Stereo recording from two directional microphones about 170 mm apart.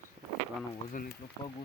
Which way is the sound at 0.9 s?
55° left (ahead or behind).